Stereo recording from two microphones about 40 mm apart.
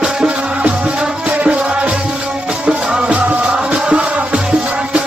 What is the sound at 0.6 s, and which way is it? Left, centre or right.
Music, right.